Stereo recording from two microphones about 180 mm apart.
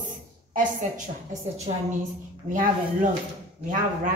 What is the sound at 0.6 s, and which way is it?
A woman's voice, 45° right (ahead or behind).